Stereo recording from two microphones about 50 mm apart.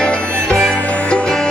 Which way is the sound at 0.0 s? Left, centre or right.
Centre.